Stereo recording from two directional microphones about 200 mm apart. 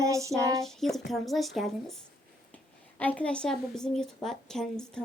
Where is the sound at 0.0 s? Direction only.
15° right (ahead or behind).